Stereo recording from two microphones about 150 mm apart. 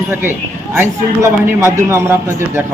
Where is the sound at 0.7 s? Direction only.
15° right (ahead or behind).